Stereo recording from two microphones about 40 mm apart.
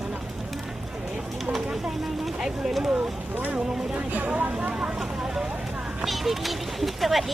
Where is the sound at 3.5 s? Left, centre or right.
Right.